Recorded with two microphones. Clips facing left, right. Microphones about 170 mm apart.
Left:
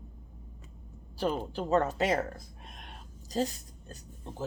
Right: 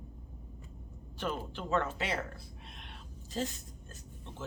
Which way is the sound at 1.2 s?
35° left (ahead or behind).